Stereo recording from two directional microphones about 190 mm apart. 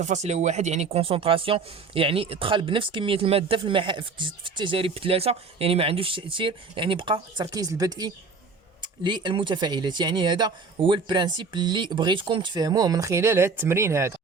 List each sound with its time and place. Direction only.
0.0 s speech: 35° right (ahead or behind); by 14.1 s 15° right (ahead or behind)